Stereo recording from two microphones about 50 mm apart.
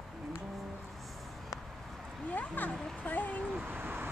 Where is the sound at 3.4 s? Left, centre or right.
Right.